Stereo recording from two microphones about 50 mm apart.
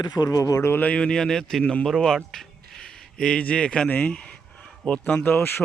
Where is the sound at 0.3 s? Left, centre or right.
Left.